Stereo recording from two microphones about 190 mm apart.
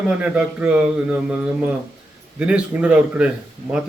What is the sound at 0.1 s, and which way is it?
A man's voice, 5° right (ahead or behind).